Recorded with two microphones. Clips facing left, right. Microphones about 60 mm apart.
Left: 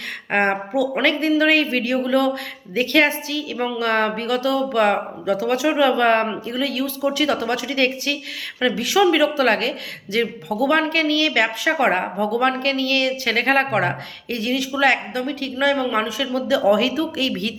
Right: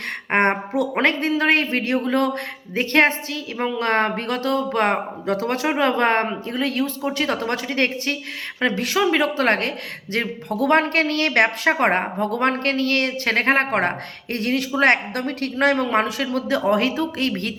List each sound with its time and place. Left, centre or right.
0.3 s speech: right
5.6 s a woman's voice: right
9.0 s a woman's voice: right
11.7 s a woman's voice: right
16.2 s speech: right